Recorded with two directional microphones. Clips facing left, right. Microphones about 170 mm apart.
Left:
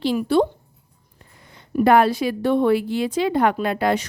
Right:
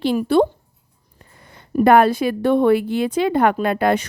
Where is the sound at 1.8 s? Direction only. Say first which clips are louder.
Right 2 dB; 55° right (ahead or behind).